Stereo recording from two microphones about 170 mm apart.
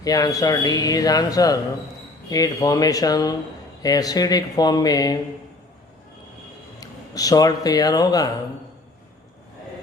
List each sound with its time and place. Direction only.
0.0 s speech: 20° left (ahead or behind)
6.7 s speech: 20° left (ahead or behind)